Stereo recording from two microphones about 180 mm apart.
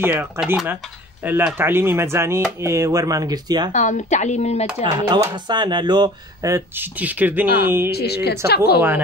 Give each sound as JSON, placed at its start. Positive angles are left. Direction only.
{"t": 0.0, "sound": "speech", "side_deg": -10}
{"t": 3.7, "sound": "speech", "side_deg": 40}
{"t": 4.8, "sound": "speech", "side_deg": -20}
{"t": 7.9, "sound": "a woman's voice", "side_deg": 65}